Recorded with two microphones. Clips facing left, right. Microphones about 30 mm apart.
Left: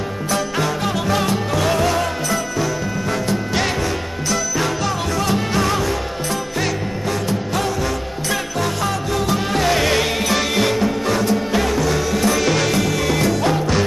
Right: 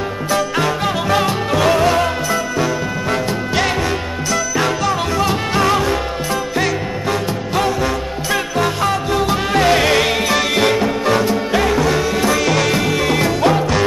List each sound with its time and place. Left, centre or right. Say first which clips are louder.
0.3 s music: right 3 dB; centre
5.1 s music: right 2 dB; centre
7.1 s music: right 2 dB; right
12.4 s music: right 2 dB; centre
12.7 s music: right 3 dB; centre